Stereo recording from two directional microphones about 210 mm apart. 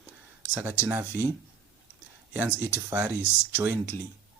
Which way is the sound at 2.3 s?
10° right (ahead or behind).